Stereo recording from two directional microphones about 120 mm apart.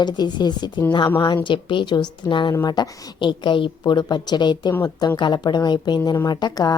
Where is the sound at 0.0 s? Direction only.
35° left (ahead or behind).